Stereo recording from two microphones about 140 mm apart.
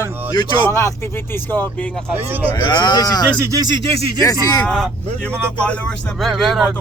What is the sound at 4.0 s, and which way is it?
Speech, 40° right (ahead or behind).